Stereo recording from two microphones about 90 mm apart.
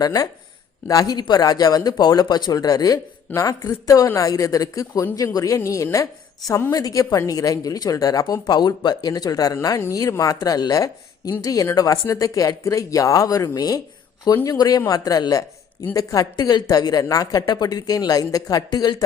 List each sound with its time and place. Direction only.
0.0 s speech: 45° left (ahead or behind)
6.5 s speech: 25° left (ahead or behind)
6.7 s speech: 40° left (ahead or behind)